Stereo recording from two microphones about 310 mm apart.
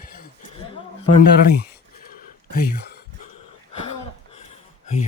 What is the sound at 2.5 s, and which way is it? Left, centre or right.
Speech, left.